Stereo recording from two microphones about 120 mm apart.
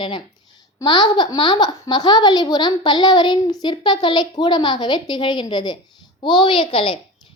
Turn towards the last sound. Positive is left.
turn(degrees=50)  # may be behind; listen again after turning